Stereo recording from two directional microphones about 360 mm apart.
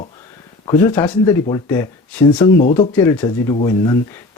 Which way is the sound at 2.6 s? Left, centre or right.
Left.